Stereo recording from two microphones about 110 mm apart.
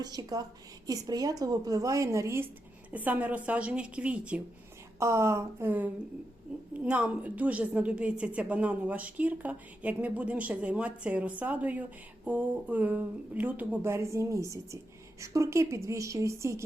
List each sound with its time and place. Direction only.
0.0 s speech: 35° right (ahead or behind)
2.9 s a woman's voice: 15° right (ahead or behind)
4.9 s a woman's voice: 25° right (ahead or behind)